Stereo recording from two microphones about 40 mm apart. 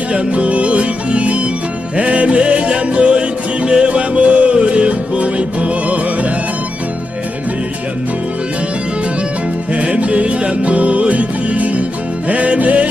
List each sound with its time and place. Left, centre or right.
0.1 s music: right
9.7 s music: right